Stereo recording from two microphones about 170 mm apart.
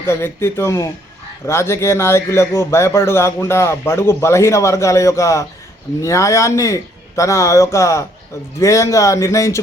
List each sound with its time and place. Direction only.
0.0 s speech: 15° left (ahead or behind)